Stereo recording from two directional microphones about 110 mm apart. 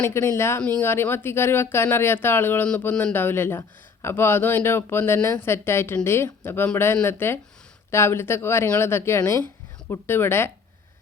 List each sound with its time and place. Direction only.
0.0 s speech: 25° left (ahead or behind)